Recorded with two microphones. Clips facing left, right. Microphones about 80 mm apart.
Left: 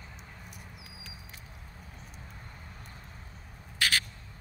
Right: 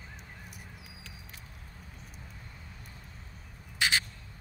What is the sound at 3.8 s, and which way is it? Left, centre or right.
Crow, centre.